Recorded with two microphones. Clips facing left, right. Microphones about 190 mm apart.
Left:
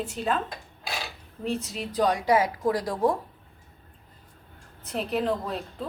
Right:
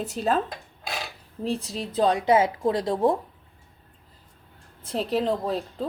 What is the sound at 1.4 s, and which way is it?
Speech, 30° right (ahead or behind).